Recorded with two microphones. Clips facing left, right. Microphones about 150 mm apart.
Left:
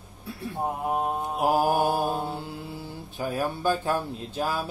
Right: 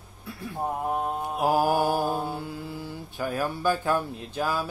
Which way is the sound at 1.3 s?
20° left (ahead or behind).